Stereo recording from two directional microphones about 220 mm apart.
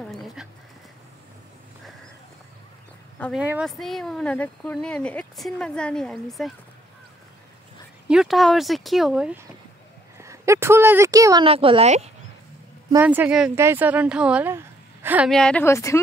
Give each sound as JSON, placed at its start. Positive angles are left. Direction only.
{"t": 0.1, "sound": "bird", "side_deg": 0}
{"t": 3.2, "sound": "speech", "side_deg": 5}
{"t": 8.1, "sound": "speech", "side_deg": 0}
{"t": 11.4, "sound": "a woman's voice", "side_deg": -25}
{"t": 12.9, "sound": "speech", "side_deg": -10}